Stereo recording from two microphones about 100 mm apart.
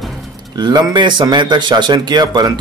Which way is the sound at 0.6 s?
40° right (ahead or behind).